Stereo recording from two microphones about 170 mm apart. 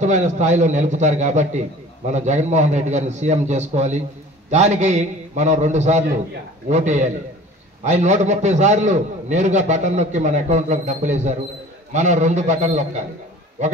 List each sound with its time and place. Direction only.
0.0 s a man's voice: 45° right (ahead or behind)